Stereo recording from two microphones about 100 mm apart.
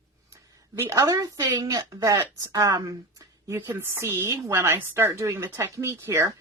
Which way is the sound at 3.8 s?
25° right (ahead or behind).